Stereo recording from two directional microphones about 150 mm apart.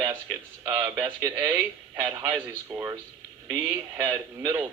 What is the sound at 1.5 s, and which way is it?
A man's voice, 15° right (ahead or behind).